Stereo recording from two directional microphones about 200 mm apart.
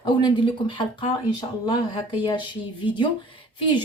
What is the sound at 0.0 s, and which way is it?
Speech, 20° left (ahead or behind).